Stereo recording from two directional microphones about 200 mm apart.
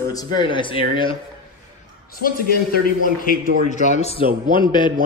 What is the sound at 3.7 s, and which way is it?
Speech, 35° left (ahead or behind).